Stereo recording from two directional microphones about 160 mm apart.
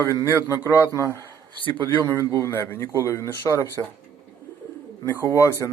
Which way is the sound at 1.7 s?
25° right (ahead or behind).